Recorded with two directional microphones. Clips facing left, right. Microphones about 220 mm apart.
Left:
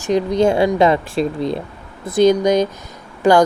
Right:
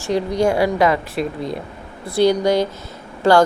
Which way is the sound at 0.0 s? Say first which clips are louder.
Left 3 dB; 20° left (ahead or behind).